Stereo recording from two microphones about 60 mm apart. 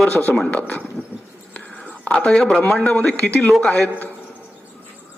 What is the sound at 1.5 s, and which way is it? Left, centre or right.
Whispering, left.